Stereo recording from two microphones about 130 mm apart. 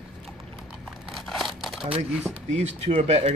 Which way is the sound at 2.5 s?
60° right (ahead or behind).